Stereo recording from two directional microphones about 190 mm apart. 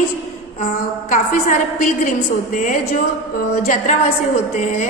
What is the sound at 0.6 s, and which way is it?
A woman's voice, 45° left (ahead or behind).